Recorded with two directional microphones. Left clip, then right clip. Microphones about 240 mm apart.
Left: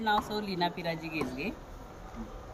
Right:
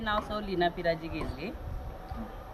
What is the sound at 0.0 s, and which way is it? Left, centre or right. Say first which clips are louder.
Speech: left 2 dB; centre.